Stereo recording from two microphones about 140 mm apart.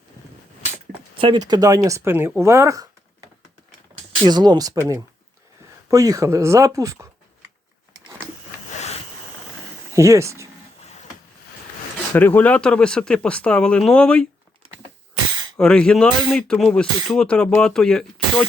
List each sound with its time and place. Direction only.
1.2 s speech: 35° right (ahead or behind); by 2.3 s 15° right (ahead or behind)
2.4 s a sound: 20° right (ahead or behind)
4.3 s speech: 30° right (ahead or behind)
5.9 s speech: 25° right (ahead or behind)
8.7 s a sound: 50° left (ahead or behind)
9.9 s speech: 20° right (ahead or behind)
12.1 s speech: 10° left (ahead or behind)
15.5 s speech: 5° left (ahead or behind)